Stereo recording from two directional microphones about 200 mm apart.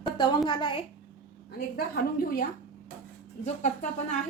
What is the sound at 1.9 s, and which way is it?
Speech, 45° left (ahead or behind).